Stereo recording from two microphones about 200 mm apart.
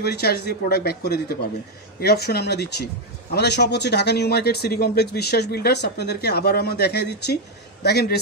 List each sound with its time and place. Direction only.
0.0 s speech: 55° left (ahead or behind)